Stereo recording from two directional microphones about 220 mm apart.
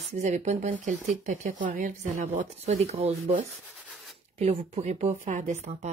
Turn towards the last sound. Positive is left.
turn(degrees=-30)  # may be behind; listen again after turning